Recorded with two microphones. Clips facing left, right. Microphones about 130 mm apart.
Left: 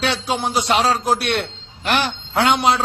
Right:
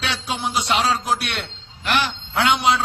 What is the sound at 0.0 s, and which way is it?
A man's voice, 35° left (ahead or behind).